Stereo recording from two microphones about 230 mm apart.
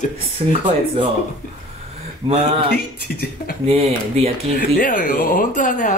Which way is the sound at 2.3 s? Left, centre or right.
Right.